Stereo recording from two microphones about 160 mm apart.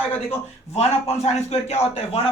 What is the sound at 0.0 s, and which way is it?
Speech, 10° left (ahead or behind).